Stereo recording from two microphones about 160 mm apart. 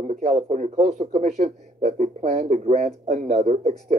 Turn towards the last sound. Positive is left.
turn(degrees=-40)  # may be behind; listen again after turning